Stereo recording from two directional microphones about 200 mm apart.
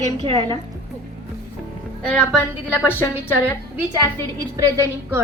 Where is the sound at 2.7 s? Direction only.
10° left (ahead or behind).